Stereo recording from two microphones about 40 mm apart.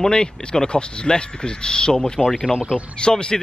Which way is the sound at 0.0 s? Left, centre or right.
Left.